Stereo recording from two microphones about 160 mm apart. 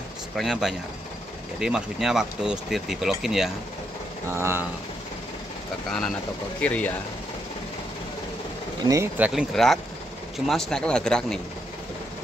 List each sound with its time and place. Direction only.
0.4 s speech: centre (ahead or behind)
4.3 s speech: 15° right (ahead or behind)
5.9 s speech: 5° left (ahead or behind)
8.8 s speech: 20° right (ahead or behind)
9.2 s speech: 5° right (ahead or behind)